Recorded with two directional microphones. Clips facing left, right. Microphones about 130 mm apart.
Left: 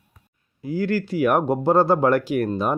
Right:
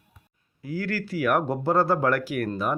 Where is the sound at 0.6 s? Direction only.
20° left (ahead or behind).